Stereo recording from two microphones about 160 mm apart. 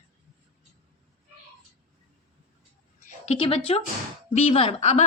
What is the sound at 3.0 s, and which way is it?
A woman's voice, 45° left (ahead or behind).